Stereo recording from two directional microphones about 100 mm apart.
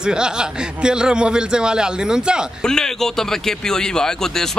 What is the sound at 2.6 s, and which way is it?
Speech, 5° left (ahead or behind).